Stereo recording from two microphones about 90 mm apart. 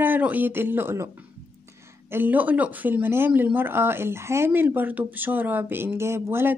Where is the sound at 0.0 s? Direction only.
20° right (ahead or behind).